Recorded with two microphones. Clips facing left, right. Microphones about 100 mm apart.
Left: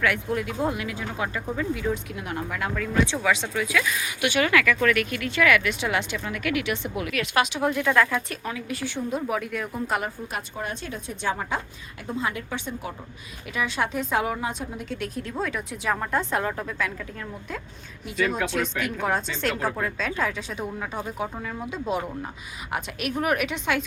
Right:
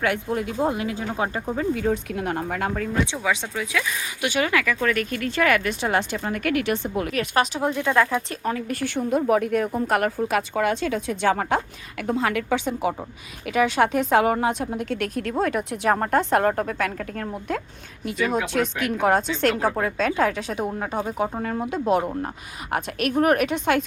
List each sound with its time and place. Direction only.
0.0 s speech: 30° right (ahead or behind)
1.5 s speech: 45° right (ahead or behind)
3.1 s speech: 20° right (ahead or behind)
4.2 s speech: 35° right (ahead or behind)
7.6 s speech: 25° right (ahead or behind)
8.4 s a woman's voice: 45° right (ahead or behind); by 12.9 s 90° right
13.5 s a woman's voice: 70° right (ahead or behind)
14.3 s speech: 55° right (ahead or behind)
19.6 s speech: 50° right (ahead or behind)
20.7 s speech: 40° right (ahead or behind)